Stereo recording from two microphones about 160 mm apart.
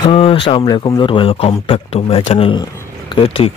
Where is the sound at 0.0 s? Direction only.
35° left (ahead or behind).